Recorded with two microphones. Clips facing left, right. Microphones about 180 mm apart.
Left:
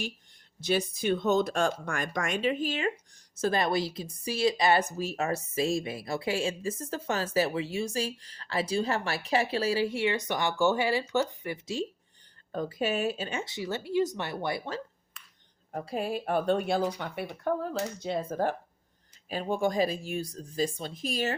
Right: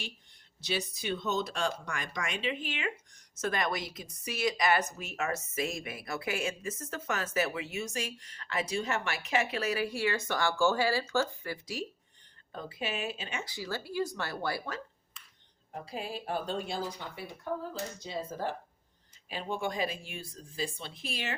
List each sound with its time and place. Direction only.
0.6 s speech: 50° left (ahead or behind); by 11.9 s 25° left (ahead or behind)
12.5 s speech: 40° left (ahead or behind)
13.4 s speech: 25° left (ahead or behind)
15.7 s speech: 50° left (ahead or behind)
19.3 s speech: 45° left (ahead or behind)